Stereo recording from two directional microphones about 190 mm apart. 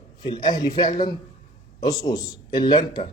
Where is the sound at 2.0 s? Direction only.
20° left (ahead or behind).